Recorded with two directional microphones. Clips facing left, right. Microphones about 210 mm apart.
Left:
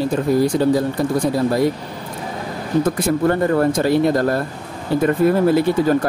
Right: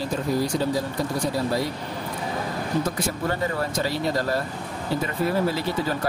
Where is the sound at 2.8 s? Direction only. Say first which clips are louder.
Left 9 dB; 55° left (ahead or behind).